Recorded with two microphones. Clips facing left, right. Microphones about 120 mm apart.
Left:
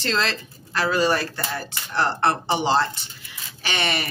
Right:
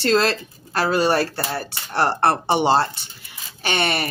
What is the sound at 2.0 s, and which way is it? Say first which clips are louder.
Speech: right 3 dB; 50° right (ahead or behind).